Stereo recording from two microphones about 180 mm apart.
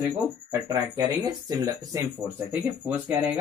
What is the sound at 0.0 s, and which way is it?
Speech, 15° right (ahead or behind).